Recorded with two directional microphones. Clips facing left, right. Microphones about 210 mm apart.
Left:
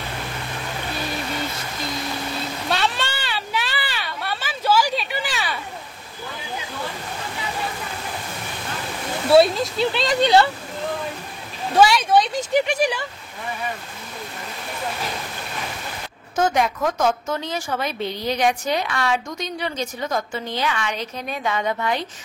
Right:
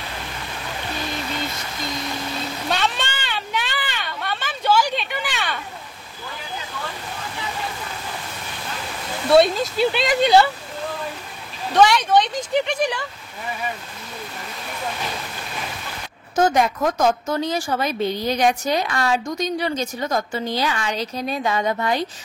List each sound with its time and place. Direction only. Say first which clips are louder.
2.7 s a sound: left 1 dB; 5° left (ahead or behind)
9.3 s speech: even; centre (ahead or behind)
11.7 s speech: even; 10° left (ahead or behind)
16.3 s a woman's voice: right 2 dB; 40° right (ahead or behind)